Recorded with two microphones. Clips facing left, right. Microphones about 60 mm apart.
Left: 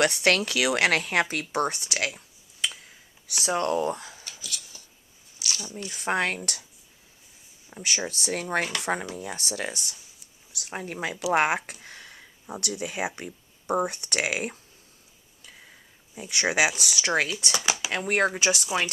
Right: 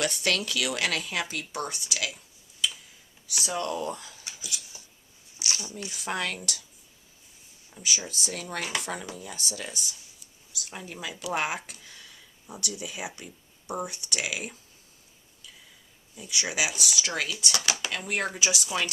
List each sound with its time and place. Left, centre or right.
0.0 s speech: left
4.3 s a sound: centre
5.4 s a sound: right
5.9 s speech: left
7.8 s speech: left
16.1 s speech: left
17.0 s speech: left
17.3 s speech: left
17.9 s speech: left